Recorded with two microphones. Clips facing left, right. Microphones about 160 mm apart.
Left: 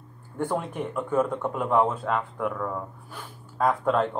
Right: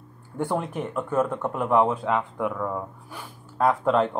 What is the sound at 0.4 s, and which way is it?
Speech, 10° right (ahead or behind).